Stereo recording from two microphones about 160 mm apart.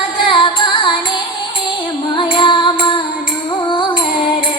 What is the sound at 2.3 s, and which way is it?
Music, 30° left (ahead or behind).